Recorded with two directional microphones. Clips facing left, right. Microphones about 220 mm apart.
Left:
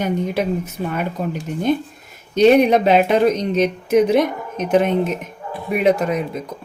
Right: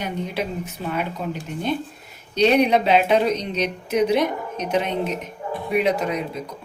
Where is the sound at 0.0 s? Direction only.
45° left (ahead or behind).